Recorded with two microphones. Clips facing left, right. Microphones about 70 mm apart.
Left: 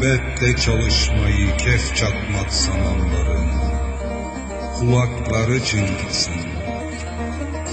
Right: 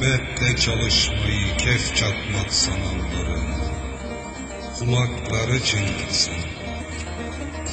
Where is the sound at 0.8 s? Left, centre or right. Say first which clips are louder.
Left 3 dB; left.